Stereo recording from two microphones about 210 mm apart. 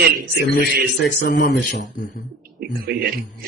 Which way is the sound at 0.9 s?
55° left (ahead or behind).